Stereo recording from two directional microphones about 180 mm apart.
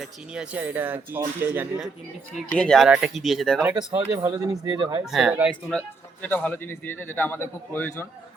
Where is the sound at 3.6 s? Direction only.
20° right (ahead or behind).